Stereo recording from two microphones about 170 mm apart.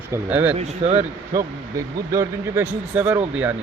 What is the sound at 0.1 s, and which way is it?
Speech, 10° right (ahead or behind).